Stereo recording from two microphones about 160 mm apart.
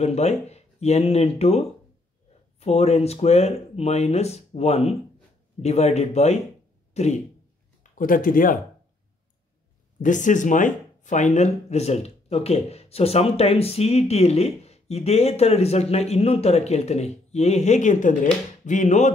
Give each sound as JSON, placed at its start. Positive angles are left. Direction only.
{"t": 0.0, "sound": "speech", "side_deg": 40}
{"t": 6.9, "sound": "throat clearing", "side_deg": 45}
{"t": 7.8, "sound": "speech", "side_deg": 55}
{"t": 10.0, "sound": "speech", "side_deg": 50}